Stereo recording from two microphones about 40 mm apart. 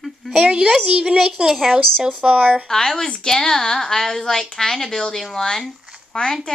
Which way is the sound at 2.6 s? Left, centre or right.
Centre.